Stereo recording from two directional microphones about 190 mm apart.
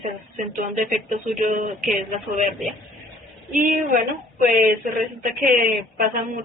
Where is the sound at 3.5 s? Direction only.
45° right (ahead or behind).